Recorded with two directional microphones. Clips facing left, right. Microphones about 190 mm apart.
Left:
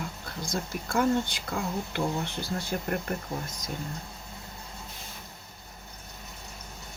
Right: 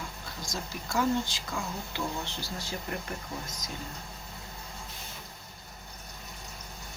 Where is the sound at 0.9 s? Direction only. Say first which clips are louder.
Left 2 dB; 55° left (ahead or behind).